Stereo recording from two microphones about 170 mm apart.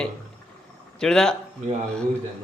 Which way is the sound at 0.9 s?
5° left (ahead or behind).